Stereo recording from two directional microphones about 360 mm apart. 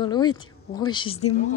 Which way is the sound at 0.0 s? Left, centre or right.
Centre.